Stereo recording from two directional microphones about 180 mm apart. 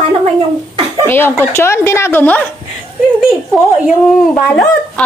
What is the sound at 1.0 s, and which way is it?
A woman's voice, 10° left (ahead or behind).